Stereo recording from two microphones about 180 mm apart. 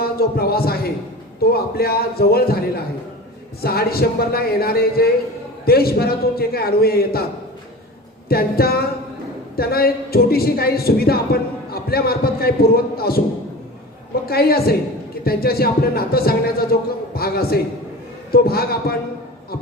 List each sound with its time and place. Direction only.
0.0 s a man's voice: 60° left (ahead or behind)
8.3 s speech: 60° left (ahead or behind)
14.3 s speech: 60° left (ahead or behind)